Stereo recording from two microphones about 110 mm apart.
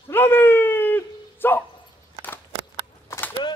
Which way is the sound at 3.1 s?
25° left (ahead or behind).